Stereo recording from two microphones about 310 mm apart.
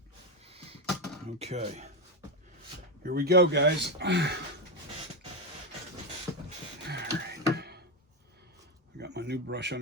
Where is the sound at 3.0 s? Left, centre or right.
Right.